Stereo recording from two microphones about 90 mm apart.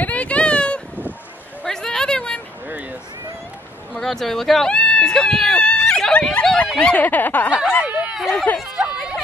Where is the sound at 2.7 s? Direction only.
20° right (ahead or behind).